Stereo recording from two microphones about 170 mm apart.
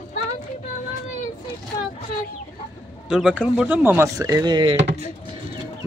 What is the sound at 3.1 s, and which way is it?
Speech, 5° right (ahead or behind).